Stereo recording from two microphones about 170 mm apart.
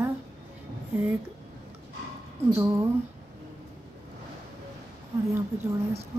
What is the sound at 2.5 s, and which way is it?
Speech, 15° right (ahead or behind).